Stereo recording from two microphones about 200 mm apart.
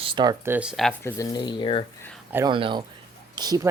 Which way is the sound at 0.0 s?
25° right (ahead or behind).